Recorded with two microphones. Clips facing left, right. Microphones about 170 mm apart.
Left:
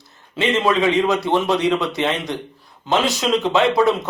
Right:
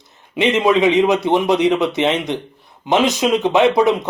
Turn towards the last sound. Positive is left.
turn(degrees=-20)  # may be behind; listen again after turning